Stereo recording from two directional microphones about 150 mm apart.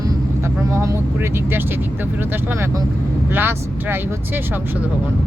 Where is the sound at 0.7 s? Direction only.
20° right (ahead or behind).